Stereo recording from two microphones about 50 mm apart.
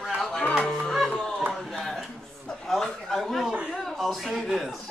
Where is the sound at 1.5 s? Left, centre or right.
Centre.